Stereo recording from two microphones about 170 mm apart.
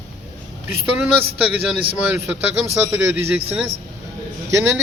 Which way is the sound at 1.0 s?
5° right (ahead or behind).